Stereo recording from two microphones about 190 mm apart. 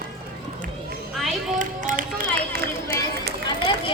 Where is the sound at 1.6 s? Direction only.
45° right (ahead or behind).